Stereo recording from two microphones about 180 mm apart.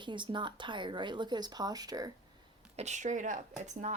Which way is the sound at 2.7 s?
40° right (ahead or behind).